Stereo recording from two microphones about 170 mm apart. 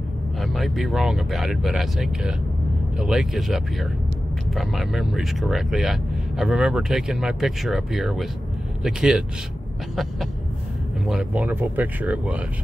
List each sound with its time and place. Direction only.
0.4 s speech: centre (ahead or behind)
11.1 s speech: 5° right (ahead or behind)